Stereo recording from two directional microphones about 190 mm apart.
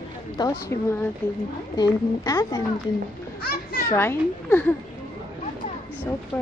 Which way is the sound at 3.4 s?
55° left (ahead or behind).